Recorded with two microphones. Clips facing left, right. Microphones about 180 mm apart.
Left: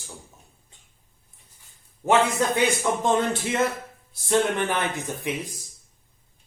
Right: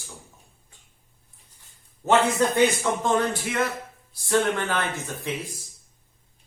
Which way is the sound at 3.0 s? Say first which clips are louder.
Left 1 dB; 25° left (ahead or behind).